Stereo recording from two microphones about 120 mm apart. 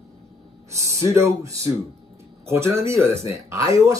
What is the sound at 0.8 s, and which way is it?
Speech, 25° right (ahead or behind).